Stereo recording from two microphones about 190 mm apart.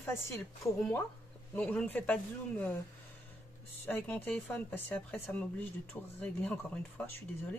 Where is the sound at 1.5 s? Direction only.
10° left (ahead or behind).